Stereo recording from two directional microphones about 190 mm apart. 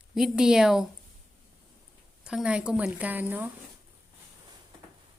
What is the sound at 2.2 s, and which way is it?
A woman's voice, 5° right (ahead or behind).